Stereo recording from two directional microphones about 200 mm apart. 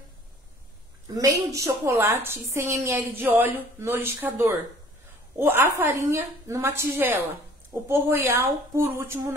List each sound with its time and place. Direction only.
1.1 s a woman's voice: 15° right (ahead or behind)